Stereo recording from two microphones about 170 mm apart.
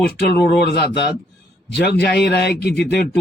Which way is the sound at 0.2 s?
75° left (ahead or behind).